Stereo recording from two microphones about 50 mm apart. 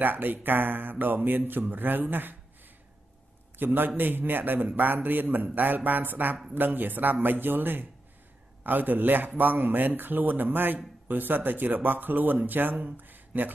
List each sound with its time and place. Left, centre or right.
0.0 s speech: right
3.5 s speech: right